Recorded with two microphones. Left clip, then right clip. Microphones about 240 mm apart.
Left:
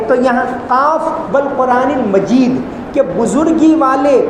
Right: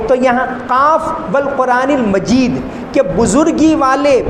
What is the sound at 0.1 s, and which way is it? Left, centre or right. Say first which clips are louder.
A man's voice: even; right.